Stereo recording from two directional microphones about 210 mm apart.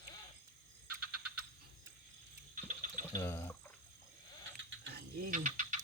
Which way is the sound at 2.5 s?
40° right (ahead or behind).